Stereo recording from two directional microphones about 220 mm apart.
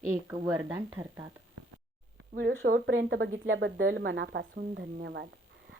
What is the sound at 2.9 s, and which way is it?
Speech, 55° right (ahead or behind).